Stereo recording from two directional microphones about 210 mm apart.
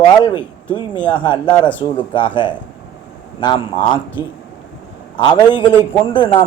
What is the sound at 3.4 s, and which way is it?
Speech, 20° left (ahead or behind).